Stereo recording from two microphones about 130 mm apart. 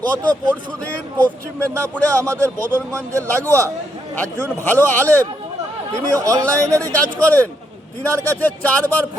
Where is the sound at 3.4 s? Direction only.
15° left (ahead or behind).